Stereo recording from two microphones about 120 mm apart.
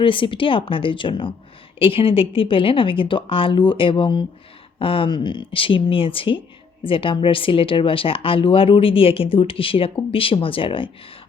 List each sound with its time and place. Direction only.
0.0 s speech: 45° left (ahead or behind)